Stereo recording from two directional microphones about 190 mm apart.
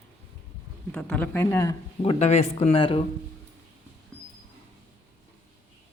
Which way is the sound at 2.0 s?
35° left (ahead or behind).